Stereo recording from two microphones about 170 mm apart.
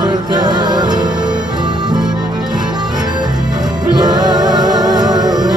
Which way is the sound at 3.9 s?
25° right (ahead or behind).